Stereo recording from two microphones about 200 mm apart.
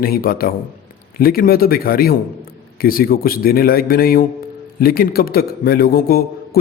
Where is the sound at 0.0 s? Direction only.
45° left (ahead or behind).